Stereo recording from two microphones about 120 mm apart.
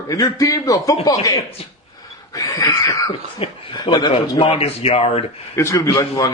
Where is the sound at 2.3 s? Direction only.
30° left (ahead or behind).